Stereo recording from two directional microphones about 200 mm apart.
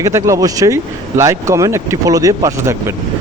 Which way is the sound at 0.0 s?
15° right (ahead or behind).